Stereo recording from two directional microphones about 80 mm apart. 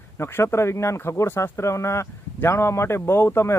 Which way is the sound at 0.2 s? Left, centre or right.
Left.